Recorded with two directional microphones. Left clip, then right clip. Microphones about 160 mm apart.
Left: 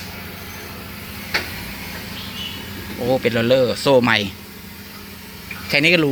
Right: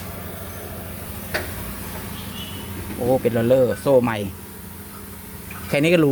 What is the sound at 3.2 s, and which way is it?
Speech, 10° right (ahead or behind).